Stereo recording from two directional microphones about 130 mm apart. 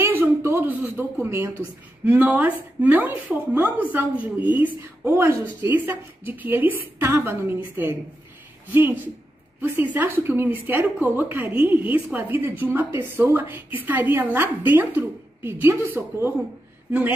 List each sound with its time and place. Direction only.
0.0 s a woman's voice: 15° right (ahead or behind)